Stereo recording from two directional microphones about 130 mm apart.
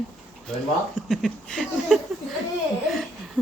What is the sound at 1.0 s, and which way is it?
Speech, centre (ahead or behind).